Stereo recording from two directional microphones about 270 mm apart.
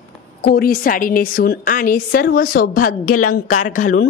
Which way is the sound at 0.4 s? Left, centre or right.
Left.